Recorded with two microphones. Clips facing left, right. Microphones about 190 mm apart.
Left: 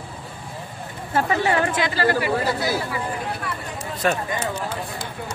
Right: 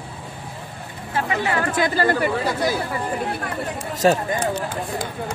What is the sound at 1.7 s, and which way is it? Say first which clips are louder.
Speech: right 2 dB; 50° right (ahead or behind).